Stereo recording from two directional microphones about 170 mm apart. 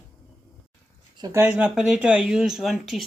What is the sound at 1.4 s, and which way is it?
Speech, 5° right (ahead or behind).